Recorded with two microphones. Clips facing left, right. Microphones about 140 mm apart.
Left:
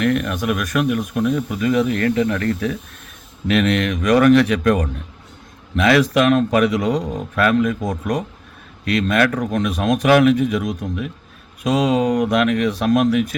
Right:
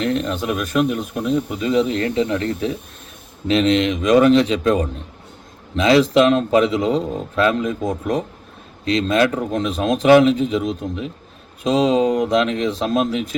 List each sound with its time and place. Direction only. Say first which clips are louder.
0.0 s a man's voice: left 2 dB; 25° right (ahead or behind)